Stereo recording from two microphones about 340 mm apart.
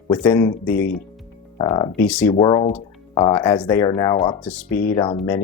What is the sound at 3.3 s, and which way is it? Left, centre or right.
Speech, centre.